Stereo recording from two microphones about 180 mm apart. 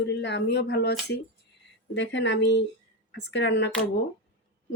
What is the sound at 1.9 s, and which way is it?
Speech, 85° left.